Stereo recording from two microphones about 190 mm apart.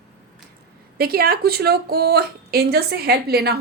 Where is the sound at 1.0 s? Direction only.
55° right (ahead or behind).